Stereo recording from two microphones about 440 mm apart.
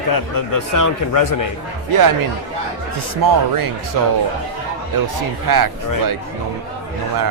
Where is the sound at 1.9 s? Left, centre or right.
Right.